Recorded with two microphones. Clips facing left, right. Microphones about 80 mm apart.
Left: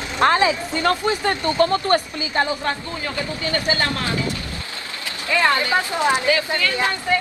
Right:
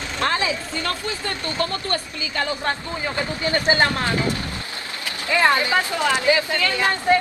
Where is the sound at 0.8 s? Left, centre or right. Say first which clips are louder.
Left 10 dB; left.